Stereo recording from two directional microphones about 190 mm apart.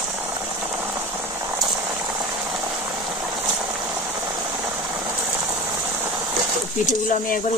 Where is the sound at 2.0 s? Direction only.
20° right (ahead or behind).